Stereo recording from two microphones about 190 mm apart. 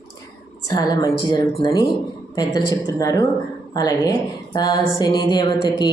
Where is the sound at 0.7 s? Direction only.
20° left (ahead or behind).